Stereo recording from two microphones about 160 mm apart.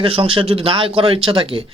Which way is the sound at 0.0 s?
35° right (ahead or behind).